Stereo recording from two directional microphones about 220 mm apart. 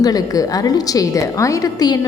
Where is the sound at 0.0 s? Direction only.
15° left (ahead or behind).